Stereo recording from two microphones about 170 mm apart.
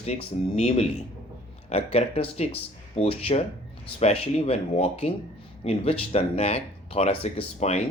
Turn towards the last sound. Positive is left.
turn(degrees=40)  # may be behind; listen again after turning